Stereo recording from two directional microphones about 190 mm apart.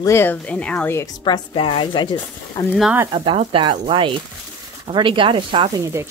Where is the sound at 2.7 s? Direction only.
5° right (ahead or behind).